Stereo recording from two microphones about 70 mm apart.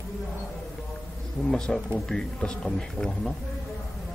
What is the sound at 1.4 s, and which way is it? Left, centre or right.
Speech, centre.